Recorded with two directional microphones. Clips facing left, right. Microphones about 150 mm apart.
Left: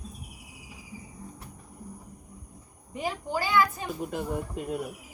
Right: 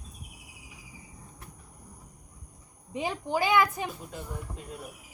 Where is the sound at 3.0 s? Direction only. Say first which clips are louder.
Right 2 dB; 20° right (ahead or behind).